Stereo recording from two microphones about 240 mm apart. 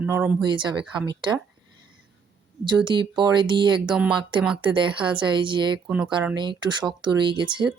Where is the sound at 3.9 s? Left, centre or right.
Centre.